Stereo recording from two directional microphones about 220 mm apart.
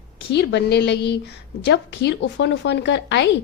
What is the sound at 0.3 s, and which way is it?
A woman's voice, 50° left (ahead or behind).